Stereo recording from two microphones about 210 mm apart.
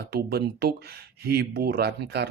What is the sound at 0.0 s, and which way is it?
Speech, 50° right (ahead or behind).